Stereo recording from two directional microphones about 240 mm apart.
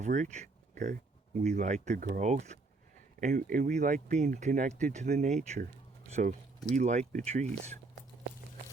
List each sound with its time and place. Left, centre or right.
0.0 s speech: right